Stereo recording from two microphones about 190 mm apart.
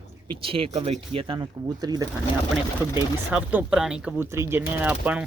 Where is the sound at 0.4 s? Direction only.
30° right (ahead or behind).